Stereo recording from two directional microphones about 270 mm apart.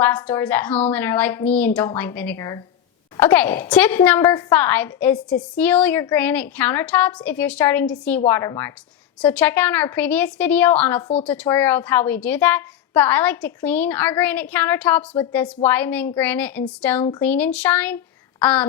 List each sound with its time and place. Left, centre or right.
0.0 s a woman's voice: centre